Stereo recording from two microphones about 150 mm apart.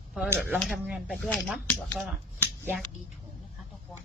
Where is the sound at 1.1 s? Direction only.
5° left (ahead or behind).